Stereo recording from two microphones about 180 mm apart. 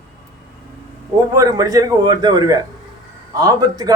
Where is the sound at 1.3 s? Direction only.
20° right (ahead or behind).